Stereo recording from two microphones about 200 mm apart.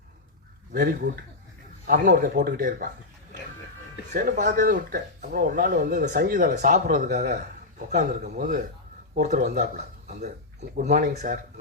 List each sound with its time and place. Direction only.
0.7 s speech: 50° right (ahead or behind)
4.1 s speech: 50° right (ahead or behind); by 10.3 s 35° right (ahead or behind)
10.8 s speech: 45° right (ahead or behind)